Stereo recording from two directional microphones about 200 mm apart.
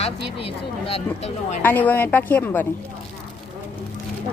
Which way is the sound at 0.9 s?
30° left (ahead or behind).